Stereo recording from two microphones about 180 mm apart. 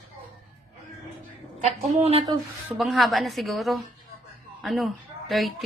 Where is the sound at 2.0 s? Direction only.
35° right (ahead or behind).